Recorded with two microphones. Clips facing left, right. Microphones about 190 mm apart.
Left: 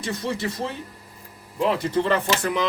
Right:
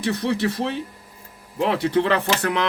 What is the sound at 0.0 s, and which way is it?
A man's voice, 65° right (ahead or behind).